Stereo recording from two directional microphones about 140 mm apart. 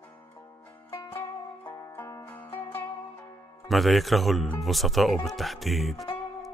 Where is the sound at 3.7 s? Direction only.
Centre (ahead or behind).